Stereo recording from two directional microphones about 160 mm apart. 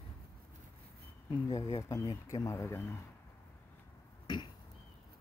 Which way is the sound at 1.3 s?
20° left (ahead or behind).